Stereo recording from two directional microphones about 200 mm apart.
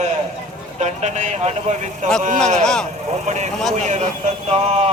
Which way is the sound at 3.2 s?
35° right (ahead or behind).